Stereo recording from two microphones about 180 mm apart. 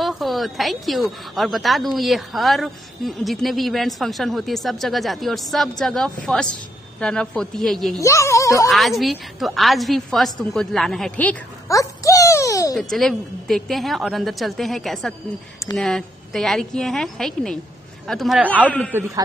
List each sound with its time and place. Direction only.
0.0 s a woman's voice: centre (ahead or behind)
8.0 s speech: 15° left (ahead or behind)
8.6 s a woman's voice: centre (ahead or behind); by 12.7 s 20° left (ahead or behind)
12.7 s a woman's voice: centre (ahead or behind)
18.7 s speech: 10° left (ahead or behind)